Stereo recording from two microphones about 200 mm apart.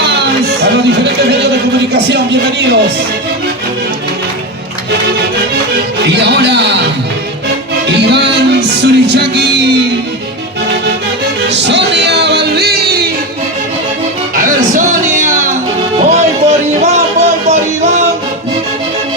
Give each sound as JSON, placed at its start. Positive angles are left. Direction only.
{"t": 0.6, "sound": "a sound", "side_deg": -55}
{"t": 1.9, "sound": "speech", "side_deg": -55}
{"t": 6.1, "sound": "speech", "side_deg": -60}
{"t": 7.9, "sound": "music", "side_deg": -55}
{"t": 11.4, "sound": "music", "side_deg": -60}
{"t": 14.3, "sound": "music", "side_deg": -40}